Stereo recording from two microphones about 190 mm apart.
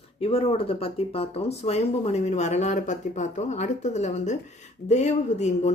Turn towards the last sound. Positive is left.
turn(degrees=35)  # may be behind; listen again after turning